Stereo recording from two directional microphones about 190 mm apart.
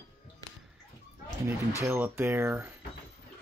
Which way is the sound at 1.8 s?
10° right (ahead or behind).